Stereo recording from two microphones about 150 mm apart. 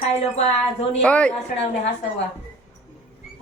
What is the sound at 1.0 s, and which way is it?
Speech, 10° left (ahead or behind).